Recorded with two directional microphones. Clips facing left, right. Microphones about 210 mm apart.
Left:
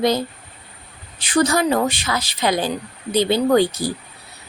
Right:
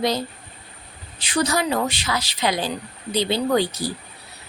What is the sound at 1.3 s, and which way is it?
A woman's voice, 50° left (ahead or behind).